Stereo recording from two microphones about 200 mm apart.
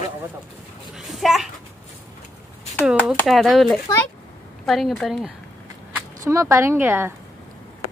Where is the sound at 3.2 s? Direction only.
Centre (ahead or behind).